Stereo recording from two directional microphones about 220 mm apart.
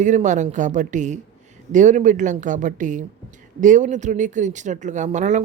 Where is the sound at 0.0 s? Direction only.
35° right (ahead or behind).